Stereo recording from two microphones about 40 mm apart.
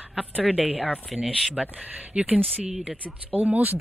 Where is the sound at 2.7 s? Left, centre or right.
Centre.